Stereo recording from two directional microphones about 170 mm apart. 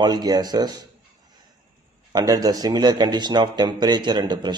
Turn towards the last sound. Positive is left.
turn(degrees=-25)  # may be behind; listen again after turning